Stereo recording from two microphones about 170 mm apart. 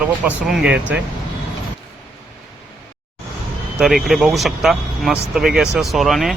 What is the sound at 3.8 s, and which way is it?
Speech, centre (ahead or behind).